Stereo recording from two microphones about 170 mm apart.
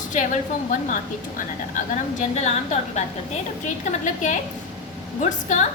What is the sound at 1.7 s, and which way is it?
A woman's voice, 45° left (ahead or behind).